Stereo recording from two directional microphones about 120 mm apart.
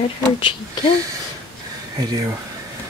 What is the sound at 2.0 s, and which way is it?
Speech, 30° right (ahead or behind).